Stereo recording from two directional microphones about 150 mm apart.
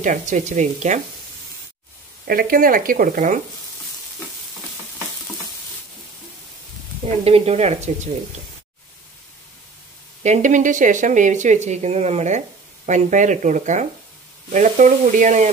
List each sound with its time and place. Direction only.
0.0 s speech: 55° right (ahead or behind)
2.2 s speech: 75° right (ahead or behind)
7.1 s speech: 45° right (ahead or behind)
10.2 s speech: 55° right (ahead or behind)